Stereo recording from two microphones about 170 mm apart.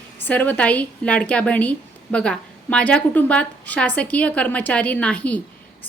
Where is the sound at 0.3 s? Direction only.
10° left (ahead or behind).